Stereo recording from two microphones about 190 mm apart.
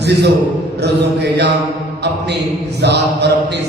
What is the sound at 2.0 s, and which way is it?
Mantra, 60° right (ahead or behind).